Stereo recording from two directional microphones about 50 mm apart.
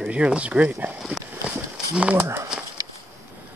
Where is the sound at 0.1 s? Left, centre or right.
Right.